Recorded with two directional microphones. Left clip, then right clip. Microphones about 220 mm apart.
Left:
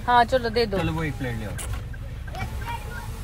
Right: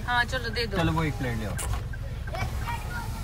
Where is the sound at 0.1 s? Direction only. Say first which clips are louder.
Left 8 dB; 5° left (ahead or behind).